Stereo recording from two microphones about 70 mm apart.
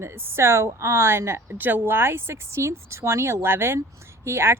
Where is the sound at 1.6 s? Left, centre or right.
Right.